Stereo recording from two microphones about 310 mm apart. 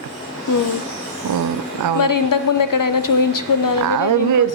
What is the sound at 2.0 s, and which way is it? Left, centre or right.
Speech, left.